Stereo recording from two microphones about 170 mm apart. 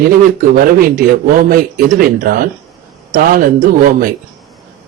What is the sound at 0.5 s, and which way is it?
A man's voice, 55° right (ahead or behind).